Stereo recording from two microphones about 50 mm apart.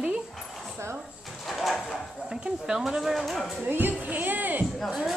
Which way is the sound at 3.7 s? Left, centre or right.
Right.